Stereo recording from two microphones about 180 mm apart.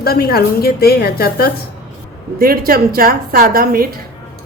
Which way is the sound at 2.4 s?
55° right (ahead or behind).